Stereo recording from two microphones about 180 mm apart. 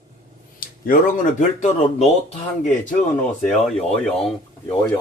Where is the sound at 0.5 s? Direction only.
50° left (ahead or behind).